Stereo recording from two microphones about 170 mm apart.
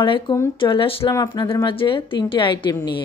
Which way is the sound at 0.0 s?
30° left (ahead or behind).